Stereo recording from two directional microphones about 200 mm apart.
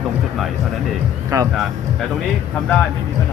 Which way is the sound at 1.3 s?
15° right (ahead or behind).